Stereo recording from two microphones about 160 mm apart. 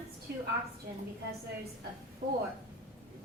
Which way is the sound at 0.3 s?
90° right.